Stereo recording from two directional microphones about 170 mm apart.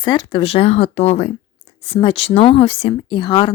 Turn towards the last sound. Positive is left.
turn(degrees=25)  # may be behind; listen again after turning